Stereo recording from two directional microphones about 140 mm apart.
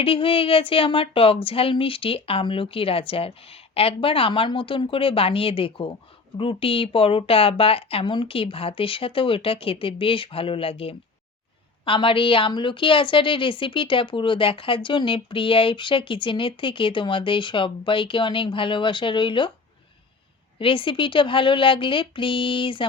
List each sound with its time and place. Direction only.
0.0 s a woman's voice: 40° left (ahead or behind)
20.6 s a woman's voice: 40° left (ahead or behind)